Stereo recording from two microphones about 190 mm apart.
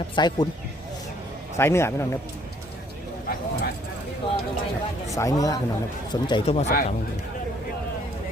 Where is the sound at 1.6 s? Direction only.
15° left (ahead or behind).